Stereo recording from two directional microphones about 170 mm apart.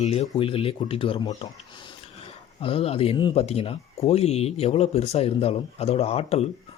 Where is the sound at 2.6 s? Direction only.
35° left (ahead or behind).